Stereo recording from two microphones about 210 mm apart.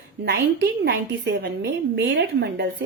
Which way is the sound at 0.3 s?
50° right (ahead or behind).